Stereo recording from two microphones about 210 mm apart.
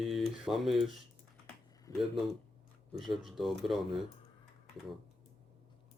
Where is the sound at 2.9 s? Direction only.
Centre (ahead or behind).